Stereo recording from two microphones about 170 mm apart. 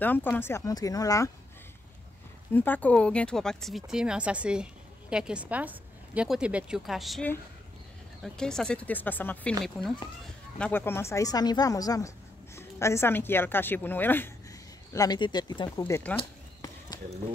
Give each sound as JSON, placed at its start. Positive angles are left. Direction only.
{"t": 0.0, "sound": "a woman's voice", "side_deg": 10}
{"t": 2.5, "sound": "a woman's voice", "side_deg": 10}
{"t": 10.6, "sound": "a woman's voice", "side_deg": 10}
{"t": 14.9, "sound": "a woman's voice", "side_deg": 20}
{"t": 16.2, "sound": "a sound", "side_deg": 20}